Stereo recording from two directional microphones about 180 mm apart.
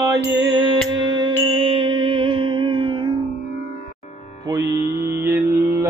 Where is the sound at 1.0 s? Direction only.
25° right (ahead or behind).